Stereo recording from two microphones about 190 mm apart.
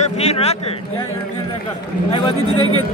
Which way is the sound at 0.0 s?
35° left (ahead or behind).